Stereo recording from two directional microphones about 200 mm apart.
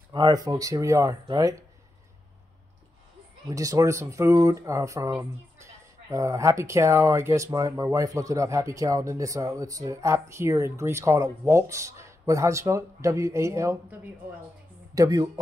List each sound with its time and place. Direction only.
0.1 s speech: 20° right (ahead or behind)
3.4 s speech: 15° right (ahead or behind)
15.0 s speech: 20° right (ahead or behind)